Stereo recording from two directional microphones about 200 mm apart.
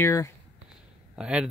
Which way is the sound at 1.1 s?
5° right (ahead or behind).